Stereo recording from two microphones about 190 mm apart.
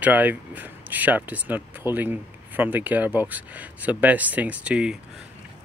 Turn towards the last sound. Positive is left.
turn(degrees=-5)  # may be behind; listen again after turning